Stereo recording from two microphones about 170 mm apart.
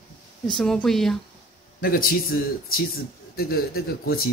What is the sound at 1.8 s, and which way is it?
Speech, 60° left (ahead or behind).